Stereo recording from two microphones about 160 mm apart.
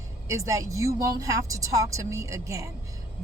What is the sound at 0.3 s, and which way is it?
Speech, 20° right (ahead or behind).